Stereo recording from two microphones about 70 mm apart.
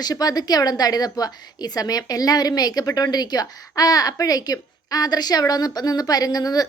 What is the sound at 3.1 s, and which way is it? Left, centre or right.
A woman's voice, left.